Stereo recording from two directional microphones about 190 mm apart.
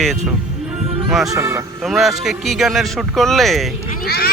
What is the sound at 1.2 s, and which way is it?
Speech, 15° right (ahead or behind).